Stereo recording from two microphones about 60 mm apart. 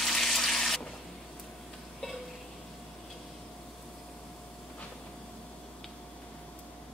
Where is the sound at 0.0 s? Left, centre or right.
Centre.